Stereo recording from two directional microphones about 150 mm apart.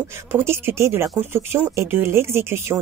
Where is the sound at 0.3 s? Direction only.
15° right (ahead or behind).